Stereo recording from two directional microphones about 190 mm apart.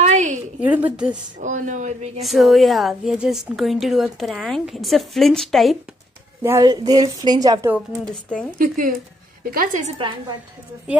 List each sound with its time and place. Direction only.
0.0 s a sound: 40° right (ahead or behind)
0.6 s a woman's voice: 10° right (ahead or behind)
1.4 s a woman's voice: 40° right (ahead or behind)
2.2 s a woman's voice: centre (ahead or behind)
6.4 s a woman's voice: 20° right (ahead or behind)
8.5 s a woman's voice: 45° right (ahead or behind)
9.9 s a woman's voice: 25° right (ahead or behind)